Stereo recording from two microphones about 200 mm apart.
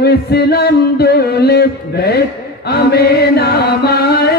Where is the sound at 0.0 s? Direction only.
55° left (ahead or behind).